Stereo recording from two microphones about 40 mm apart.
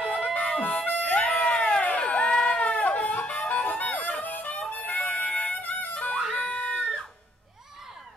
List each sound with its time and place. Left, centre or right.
0.2 s music: left
0.6 s harmonica: left
2.0 s music: left
4.2 s harmonica: left
5.7 s music: left
6.4 s a sound: left